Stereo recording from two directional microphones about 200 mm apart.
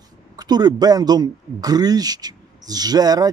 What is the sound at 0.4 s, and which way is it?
A woman's voice, 20° right (ahead or behind).